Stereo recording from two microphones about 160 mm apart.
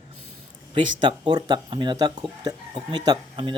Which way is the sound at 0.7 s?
30° right (ahead or behind).